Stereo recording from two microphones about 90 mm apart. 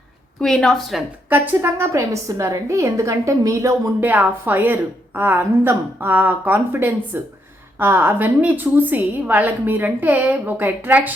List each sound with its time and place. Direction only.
0.3 s a woman's voice: 5° left (ahead or behind)
1.3 s a woman's voice: 25° right (ahead or behind)
4.0 s a woman's voice: 20° right (ahead or behind)